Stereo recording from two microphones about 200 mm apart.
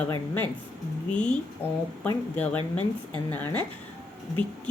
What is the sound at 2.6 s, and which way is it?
Speech, 25° right (ahead or behind).